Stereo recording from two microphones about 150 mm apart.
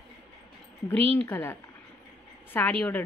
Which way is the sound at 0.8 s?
10° left (ahead or behind).